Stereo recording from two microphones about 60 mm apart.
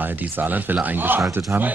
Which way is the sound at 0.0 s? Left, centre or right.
Right.